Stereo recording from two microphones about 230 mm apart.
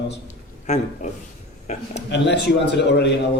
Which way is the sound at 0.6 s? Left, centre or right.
Left.